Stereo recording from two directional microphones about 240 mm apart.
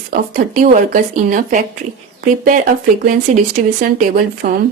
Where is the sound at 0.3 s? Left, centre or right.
Right.